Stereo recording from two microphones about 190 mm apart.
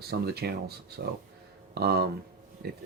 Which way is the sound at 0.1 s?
55° right (ahead or behind).